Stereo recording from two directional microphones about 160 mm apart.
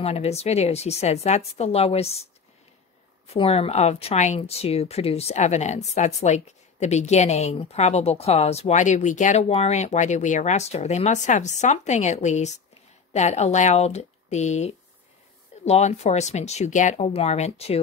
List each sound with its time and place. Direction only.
0.0 s a woman's voice: 40° left (ahead or behind)
3.3 s a woman's voice: 40° left (ahead or behind)